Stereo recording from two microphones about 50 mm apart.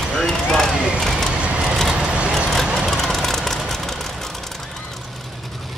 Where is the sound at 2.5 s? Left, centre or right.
Centre.